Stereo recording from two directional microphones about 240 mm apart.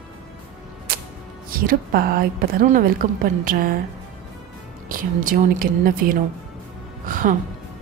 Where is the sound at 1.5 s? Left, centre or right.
Right.